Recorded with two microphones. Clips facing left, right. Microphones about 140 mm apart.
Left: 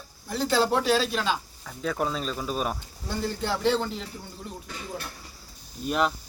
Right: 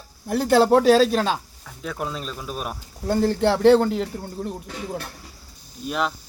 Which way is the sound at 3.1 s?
55° right (ahead or behind).